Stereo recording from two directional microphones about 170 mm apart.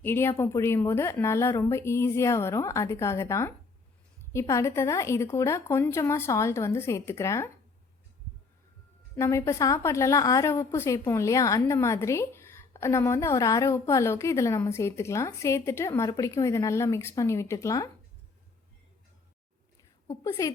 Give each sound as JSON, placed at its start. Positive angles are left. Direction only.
{"t": 0.0, "sound": "a woman's voice", "side_deg": 15}
{"t": 9.1, "sound": "a woman's voice", "side_deg": 15}
{"t": 20.1, "sound": "a woman's voice", "side_deg": 20}